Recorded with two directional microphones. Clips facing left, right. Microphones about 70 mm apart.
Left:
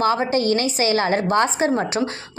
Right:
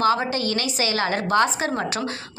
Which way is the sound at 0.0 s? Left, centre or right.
Left.